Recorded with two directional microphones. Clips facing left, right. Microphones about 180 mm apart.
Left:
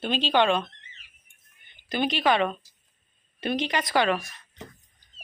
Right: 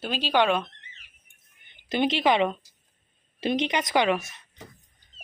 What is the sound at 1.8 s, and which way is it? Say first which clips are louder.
A woman's voice: right 1 dB; 25° right (ahead or behind).